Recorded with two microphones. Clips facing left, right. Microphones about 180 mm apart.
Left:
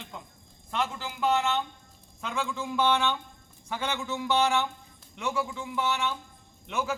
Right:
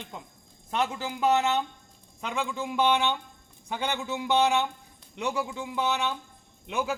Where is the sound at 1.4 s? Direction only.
15° right (ahead or behind).